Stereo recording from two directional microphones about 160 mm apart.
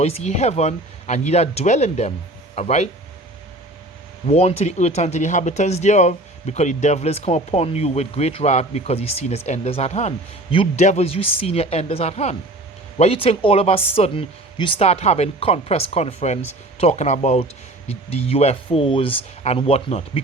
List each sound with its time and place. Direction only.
0.0 s speech: 45° left (ahead or behind)
4.3 s speech: 40° left (ahead or behind)